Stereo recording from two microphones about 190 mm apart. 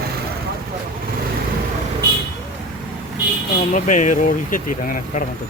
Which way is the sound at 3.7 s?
40° left (ahead or behind).